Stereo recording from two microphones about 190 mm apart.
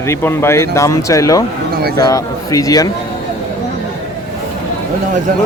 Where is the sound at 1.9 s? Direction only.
20° left (ahead or behind).